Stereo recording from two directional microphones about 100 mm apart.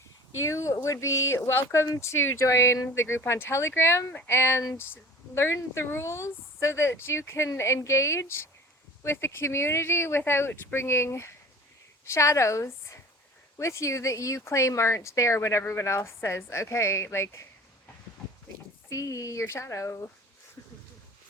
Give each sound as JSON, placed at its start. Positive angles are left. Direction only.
{"t": 0.4, "sound": "a woman's voice", "side_deg": 30}
{"t": 18.9, "sound": "speech", "side_deg": 35}